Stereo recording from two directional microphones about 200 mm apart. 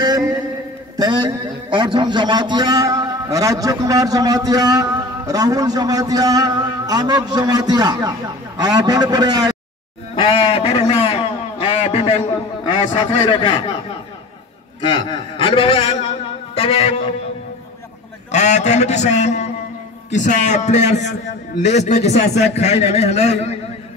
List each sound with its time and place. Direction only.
0.0 s a sound: 20° right (ahead or behind)
0.9 s a man's voice: 20° right (ahead or behind)
10.1 s a sound: 25° left (ahead or behind)
12.6 s a man's voice: 25° left (ahead or behind)
14.8 s a man's voice: 25° left (ahead or behind)
18.3 s a man's voice: 35° left (ahead or behind)